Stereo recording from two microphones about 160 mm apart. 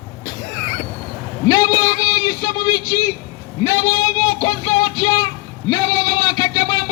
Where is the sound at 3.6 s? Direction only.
25° left (ahead or behind).